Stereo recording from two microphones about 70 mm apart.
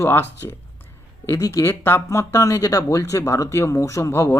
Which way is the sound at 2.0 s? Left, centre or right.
Left.